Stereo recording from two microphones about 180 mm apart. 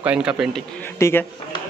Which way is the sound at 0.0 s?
5° right (ahead or behind).